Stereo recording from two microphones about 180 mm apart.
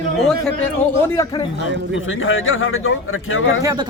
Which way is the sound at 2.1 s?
90° left.